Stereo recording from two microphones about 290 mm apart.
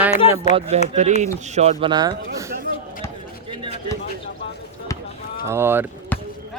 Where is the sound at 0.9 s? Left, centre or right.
Right.